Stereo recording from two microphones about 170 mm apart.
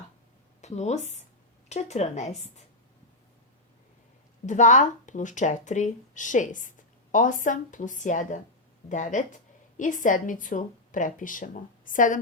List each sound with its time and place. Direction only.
0.6 s a woman's voice: 40° left (ahead or behind)
4.4 s speech: 45° left (ahead or behind)